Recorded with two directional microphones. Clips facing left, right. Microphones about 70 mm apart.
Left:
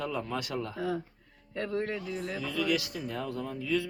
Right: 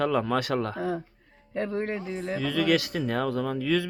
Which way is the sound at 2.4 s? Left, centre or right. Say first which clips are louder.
Right 7 dB; right.